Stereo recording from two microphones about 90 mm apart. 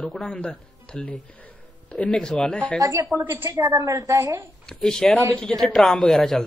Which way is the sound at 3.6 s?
40° right (ahead or behind).